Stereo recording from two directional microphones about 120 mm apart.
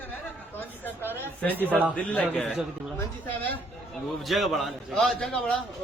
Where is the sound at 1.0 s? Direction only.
15° left (ahead or behind).